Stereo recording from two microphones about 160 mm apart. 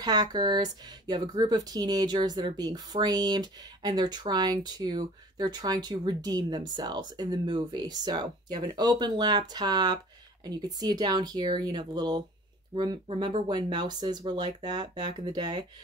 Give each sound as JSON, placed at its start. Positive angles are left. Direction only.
{"t": 0.0, "sound": "speech", "side_deg": -25}